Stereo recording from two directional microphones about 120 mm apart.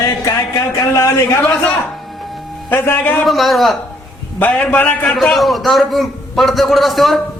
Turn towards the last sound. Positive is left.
turn(degrees=0)  # may be behind; listen again after turning